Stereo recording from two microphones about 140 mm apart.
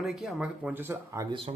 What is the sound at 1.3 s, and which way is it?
Speech, 40° right (ahead or behind).